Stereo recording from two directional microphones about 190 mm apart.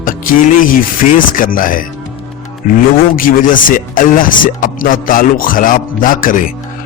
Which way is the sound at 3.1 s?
45° left (ahead or behind).